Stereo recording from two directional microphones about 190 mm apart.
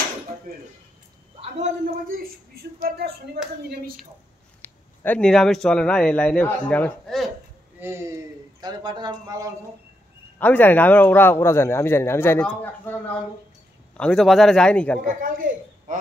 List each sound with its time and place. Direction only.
1.4 s a man's voice: 40° right (ahead or behind)
4.6 s speech: 10° left (ahead or behind)
7.8 s speech: 15° right (ahead or behind)
10.4 s a man's voice: 10° left (ahead or behind)
15.0 s a man's voice: 45° right (ahead or behind)
15.9 s a sound: 40° right (ahead or behind)